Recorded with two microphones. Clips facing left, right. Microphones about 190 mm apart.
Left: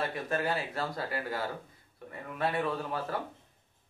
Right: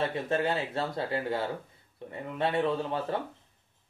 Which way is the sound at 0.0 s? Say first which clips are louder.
Right 3 dB; 25° right (ahead or behind).